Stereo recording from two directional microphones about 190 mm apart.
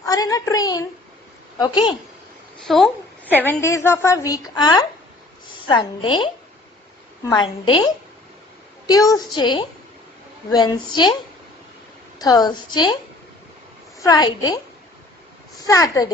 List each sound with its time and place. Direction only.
0.0 s child singing: 20° left (ahead or behind)
1.5 s a woman's voice: 20° left (ahead or behind)
2.6 s a woman's voice: centre (ahead or behind); by 7.9 s 25° left (ahead or behind)
8.9 s a woman's voice: 20° left (ahead or behind)
12.2 s a woman's voice: 20° left (ahead or behind)
14.0 s a woman's voice: 20° left (ahead or behind)
15.6 s a woman's voice: 20° left (ahead or behind)